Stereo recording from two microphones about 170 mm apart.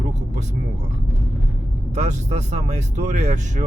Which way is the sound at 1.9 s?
45° right (ahead or behind).